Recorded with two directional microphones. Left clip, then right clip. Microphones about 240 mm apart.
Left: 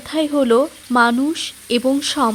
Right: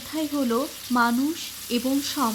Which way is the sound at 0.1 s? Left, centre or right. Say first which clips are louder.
Left 10 dB; left.